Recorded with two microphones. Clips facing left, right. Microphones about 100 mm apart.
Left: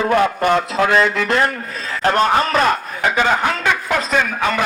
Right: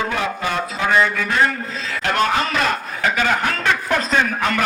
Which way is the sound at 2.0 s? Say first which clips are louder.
Left 4 dB; 35° left (ahead or behind).